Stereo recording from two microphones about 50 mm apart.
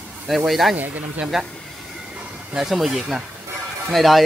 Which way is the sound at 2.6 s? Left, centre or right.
Centre.